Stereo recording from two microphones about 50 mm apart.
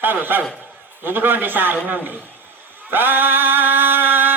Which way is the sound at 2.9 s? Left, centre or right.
Right.